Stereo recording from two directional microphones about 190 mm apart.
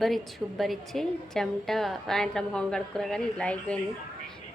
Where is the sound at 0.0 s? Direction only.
Centre (ahead or behind).